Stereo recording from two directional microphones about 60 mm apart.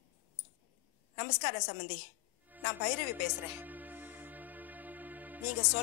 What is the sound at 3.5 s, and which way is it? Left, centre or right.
Music, right.